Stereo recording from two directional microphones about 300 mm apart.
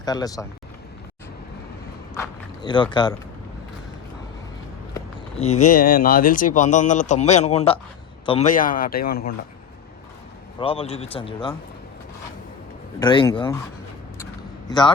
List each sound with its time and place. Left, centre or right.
0.0 s speech: centre
2.1 s speech: centre
5.4 s speech: left
10.6 s speech: centre
13.0 s speech: centre
14.7 s speech: centre